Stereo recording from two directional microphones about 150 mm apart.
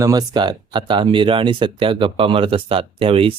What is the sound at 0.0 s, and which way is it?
Speech, 25° right (ahead or behind).